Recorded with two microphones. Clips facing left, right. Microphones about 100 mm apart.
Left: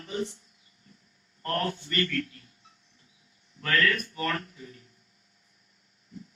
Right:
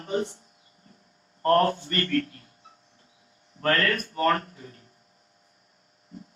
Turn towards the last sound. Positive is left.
turn(degrees=-45)  # may be behind; listen again after turning